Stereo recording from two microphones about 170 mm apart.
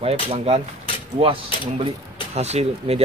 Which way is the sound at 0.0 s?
35° right (ahead or behind).